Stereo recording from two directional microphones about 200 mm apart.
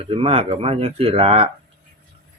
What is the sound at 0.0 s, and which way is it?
Speech, 30° right (ahead or behind).